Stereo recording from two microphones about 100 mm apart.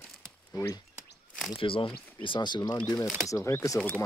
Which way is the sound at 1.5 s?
60° left (ahead or behind).